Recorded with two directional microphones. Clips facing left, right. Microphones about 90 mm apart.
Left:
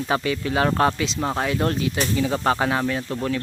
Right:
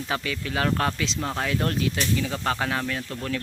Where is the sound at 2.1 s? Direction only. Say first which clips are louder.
Left 5 dB; 30° left (ahead or behind).